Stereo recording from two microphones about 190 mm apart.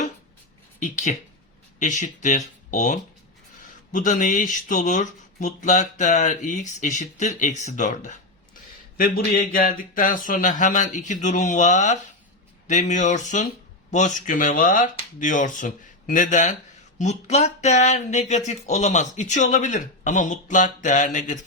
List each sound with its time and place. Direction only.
0.8 s speech: 40° left (ahead or behind)